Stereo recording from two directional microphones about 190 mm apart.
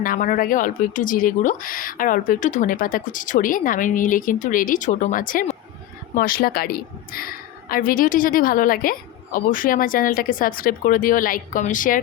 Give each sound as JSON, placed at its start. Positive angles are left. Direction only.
{"t": 0.0, "sound": "a woman's voice", "side_deg": 45}